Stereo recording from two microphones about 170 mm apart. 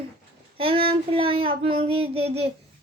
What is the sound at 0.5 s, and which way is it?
Speech, 30° right (ahead or behind).